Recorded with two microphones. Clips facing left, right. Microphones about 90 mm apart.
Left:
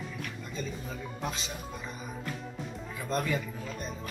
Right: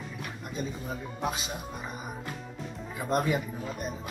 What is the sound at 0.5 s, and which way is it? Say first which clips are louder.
Speech: right 4 dB; 15° right (ahead or behind).